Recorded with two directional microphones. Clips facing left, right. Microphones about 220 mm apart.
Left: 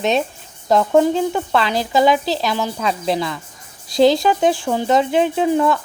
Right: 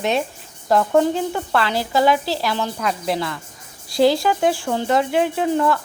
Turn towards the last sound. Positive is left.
turn(degrees=15)  # may be behind; listen again after turning